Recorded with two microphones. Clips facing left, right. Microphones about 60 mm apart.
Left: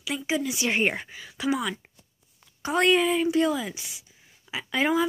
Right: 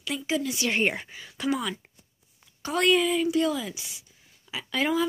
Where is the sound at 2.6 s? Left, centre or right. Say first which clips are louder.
Left 1 dB; left.